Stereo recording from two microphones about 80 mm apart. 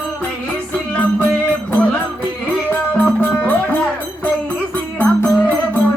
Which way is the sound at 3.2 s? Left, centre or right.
Left.